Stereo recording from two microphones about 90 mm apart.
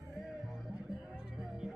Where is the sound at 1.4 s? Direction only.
5° right (ahead or behind).